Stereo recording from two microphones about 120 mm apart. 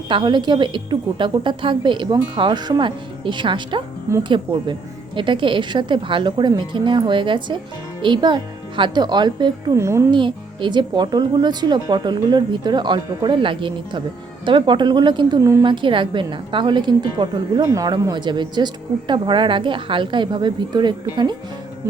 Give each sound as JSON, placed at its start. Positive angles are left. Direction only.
{"t": 0.1, "sound": "a woman's voice", "side_deg": -40}
{"t": 9.7, "sound": "a woman's voice", "side_deg": -25}
{"t": 10.1, "sound": "a woman's voice", "side_deg": -40}
{"t": 15.4, "sound": "a woman's voice", "side_deg": -25}
{"t": 15.6, "sound": "a woman's voice", "side_deg": -40}